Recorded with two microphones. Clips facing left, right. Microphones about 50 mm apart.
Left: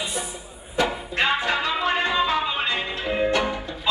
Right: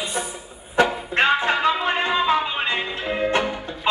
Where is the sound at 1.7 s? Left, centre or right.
Centre.